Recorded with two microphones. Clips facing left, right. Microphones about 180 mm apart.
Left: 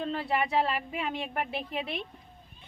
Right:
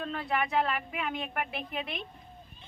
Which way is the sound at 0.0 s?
30° left (ahead or behind).